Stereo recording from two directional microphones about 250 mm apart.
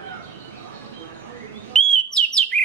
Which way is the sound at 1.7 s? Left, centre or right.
Centre.